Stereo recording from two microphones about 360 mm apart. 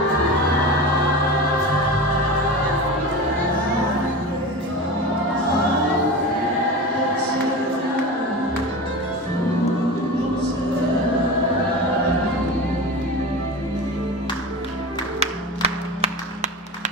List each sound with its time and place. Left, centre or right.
15.2 s music: centre